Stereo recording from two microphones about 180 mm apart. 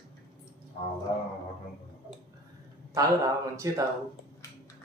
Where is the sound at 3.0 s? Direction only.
20° right (ahead or behind).